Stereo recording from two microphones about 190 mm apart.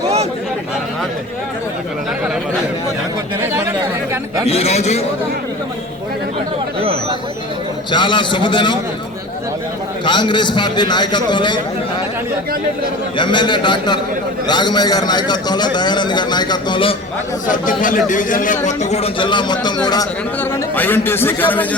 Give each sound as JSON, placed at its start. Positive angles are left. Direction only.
{"t": 4.4, "sound": "speech", "side_deg": 35}
{"t": 7.9, "sound": "a man's voice", "side_deg": 25}
{"t": 10.1, "sound": "a man's voice", "side_deg": 25}
{"t": 13.1, "sound": "a man's voice", "side_deg": 25}
{"t": 17.5, "sound": "speech", "side_deg": 45}
{"t": 20.4, "sound": "speech", "side_deg": 10}